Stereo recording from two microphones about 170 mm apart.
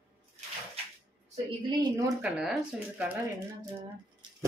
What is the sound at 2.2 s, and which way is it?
Speech, 5° right (ahead or behind).